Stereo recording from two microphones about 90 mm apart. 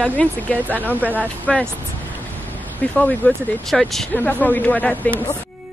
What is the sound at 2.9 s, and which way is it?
Speech, 20° left (ahead or behind).